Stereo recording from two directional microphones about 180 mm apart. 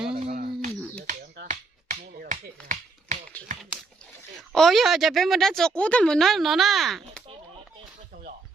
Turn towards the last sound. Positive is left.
turn(degrees=0)  # may be behind; listen again after turning